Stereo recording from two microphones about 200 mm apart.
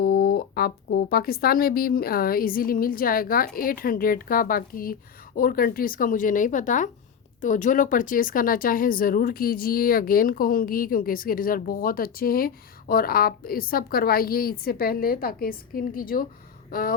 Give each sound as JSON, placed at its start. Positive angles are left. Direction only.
{"t": 0.0, "sound": "speech", "side_deg": 50}